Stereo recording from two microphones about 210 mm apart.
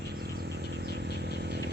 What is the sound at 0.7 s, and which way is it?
Vehicle, 50° right (ahead or behind).